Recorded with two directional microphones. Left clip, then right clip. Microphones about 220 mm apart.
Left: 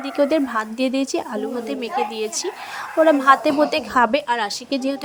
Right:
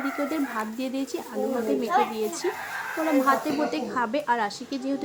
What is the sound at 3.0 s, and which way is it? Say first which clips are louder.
A child's voice: left 8 dB; 40° left (ahead or behind).